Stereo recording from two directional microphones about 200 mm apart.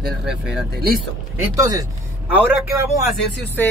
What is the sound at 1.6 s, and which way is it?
Speech, 20° right (ahead or behind).